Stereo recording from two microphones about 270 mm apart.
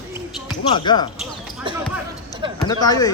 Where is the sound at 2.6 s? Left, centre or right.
Centre.